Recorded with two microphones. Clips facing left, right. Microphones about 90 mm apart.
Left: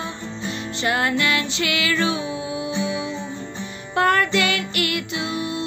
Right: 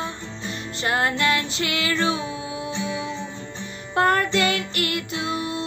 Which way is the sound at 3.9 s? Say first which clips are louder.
Left 1 dB; 35° right (ahead or behind).